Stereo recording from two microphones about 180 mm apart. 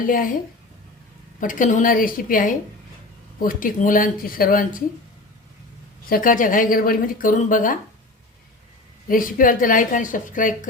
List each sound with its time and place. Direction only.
0.0 s a woman's voice: 50° left (ahead or behind)
1.4 s a woman's voice: 45° left (ahead or behind)
6.1 s a woman's voice: 50° left (ahead or behind)
9.0 s a woman's voice: 50° left (ahead or behind)